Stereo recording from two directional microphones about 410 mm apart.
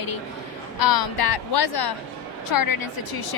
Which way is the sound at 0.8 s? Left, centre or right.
Left.